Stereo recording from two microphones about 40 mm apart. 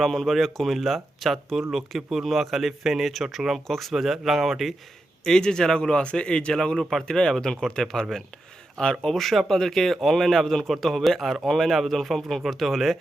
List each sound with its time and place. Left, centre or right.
0.0 s a man's voice: centre
3.9 s a man's voice: centre
5.2 s speech: centre
6.7 s a man's voice: centre